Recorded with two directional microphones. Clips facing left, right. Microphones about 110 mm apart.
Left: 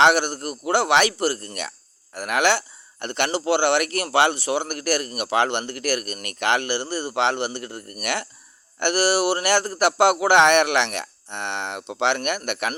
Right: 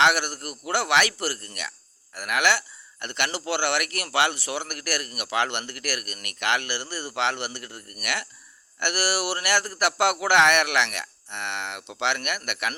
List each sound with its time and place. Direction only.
0.0 s speech: 30° left (ahead or behind)